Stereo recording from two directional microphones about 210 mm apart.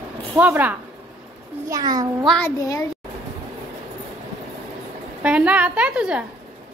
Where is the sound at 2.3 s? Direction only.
10° left (ahead or behind).